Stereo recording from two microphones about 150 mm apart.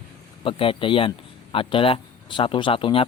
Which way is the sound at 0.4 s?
35° left (ahead or behind).